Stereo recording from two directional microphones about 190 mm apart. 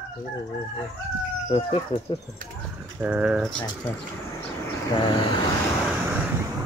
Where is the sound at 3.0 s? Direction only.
5° right (ahead or behind).